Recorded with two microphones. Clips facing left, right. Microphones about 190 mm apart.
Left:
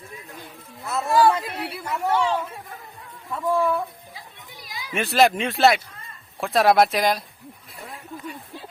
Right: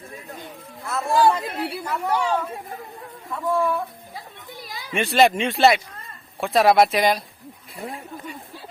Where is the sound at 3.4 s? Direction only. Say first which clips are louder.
Even; centre (ahead or behind).